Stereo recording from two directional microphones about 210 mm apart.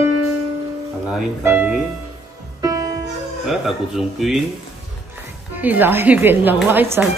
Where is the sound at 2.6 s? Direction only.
15° right (ahead or behind).